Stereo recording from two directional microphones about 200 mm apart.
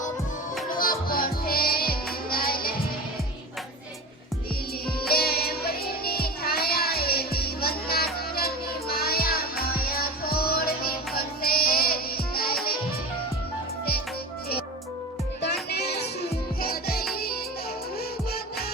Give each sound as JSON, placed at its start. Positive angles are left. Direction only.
{"t": 0.8, "sound": "music", "side_deg": 45}
{"t": 5.1, "sound": "music", "side_deg": 50}
{"t": 15.7, "sound": "music", "side_deg": 55}